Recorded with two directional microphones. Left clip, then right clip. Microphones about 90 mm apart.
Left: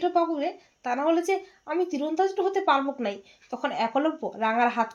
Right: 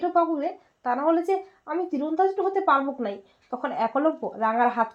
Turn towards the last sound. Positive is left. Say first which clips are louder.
# right 1 dB
turn(degrees=-45)  # may be behind; listen again after turning